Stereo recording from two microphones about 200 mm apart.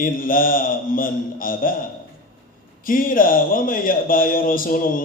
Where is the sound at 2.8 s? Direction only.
45° left (ahead or behind).